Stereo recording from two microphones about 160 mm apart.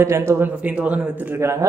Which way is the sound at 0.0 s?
15° right (ahead or behind).